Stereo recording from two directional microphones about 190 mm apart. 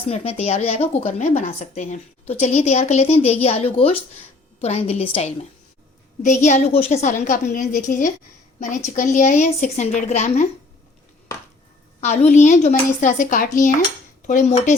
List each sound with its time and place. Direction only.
0.1 s speech: 35° left (ahead or behind)
11.9 s speech: 35° left (ahead or behind)